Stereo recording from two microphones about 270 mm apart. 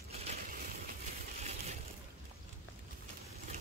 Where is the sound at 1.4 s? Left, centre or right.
Right.